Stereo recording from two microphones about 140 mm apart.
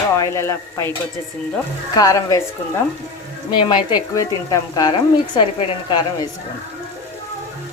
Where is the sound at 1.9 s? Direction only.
25° left (ahead or behind).